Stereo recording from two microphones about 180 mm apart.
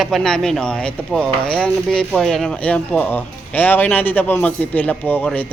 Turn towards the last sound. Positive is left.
turn(degrees=5)  # may be behind; listen again after turning